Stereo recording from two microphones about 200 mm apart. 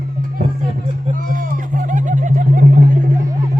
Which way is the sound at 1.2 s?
40° right (ahead or behind).